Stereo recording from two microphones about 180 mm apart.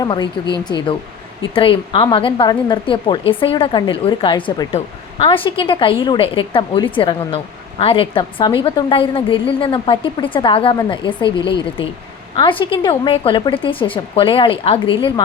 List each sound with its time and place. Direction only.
0.0 s speech: 25° left (ahead or behind)
1.4 s speech: 30° left (ahead or behind)